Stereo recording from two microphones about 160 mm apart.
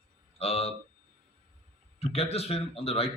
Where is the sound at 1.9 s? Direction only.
40° left (ahead or behind).